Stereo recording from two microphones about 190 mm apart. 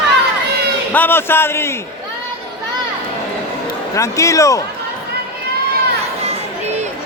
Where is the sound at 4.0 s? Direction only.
15° left (ahead or behind).